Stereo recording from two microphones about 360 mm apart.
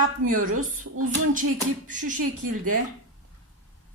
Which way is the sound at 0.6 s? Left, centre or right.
Right.